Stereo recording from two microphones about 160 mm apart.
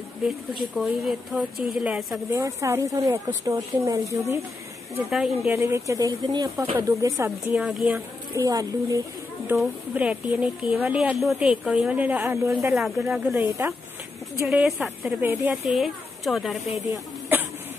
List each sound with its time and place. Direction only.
0.6 s speech: centre (ahead or behind)
2.3 s speech: 20° right (ahead or behind)
5.1 s speech: centre (ahead or behind)
5.5 s speech: 15° right (ahead or behind)
7.6 s speech: 5° right (ahead or behind)
8.4 s speech: 20° right (ahead or behind)
9.6 s speech: 10° right (ahead or behind)
15.5 s speech: centre (ahead or behind)